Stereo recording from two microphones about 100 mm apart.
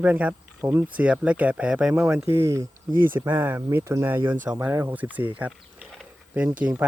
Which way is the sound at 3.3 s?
20° right (ahead or behind).